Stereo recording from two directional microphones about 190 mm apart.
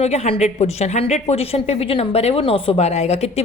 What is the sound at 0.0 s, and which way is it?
A woman's voice, 35° left (ahead or behind).